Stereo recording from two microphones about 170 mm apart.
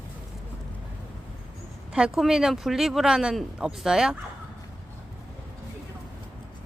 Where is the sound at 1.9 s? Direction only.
5° right (ahead or behind).